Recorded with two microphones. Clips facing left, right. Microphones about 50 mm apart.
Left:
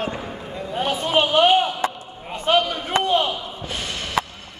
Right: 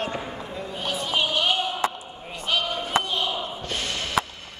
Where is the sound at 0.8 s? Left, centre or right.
Left.